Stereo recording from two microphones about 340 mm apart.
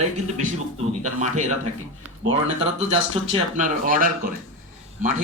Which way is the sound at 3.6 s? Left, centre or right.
Right.